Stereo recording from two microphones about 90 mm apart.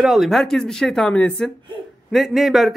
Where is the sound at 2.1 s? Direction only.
Centre (ahead or behind).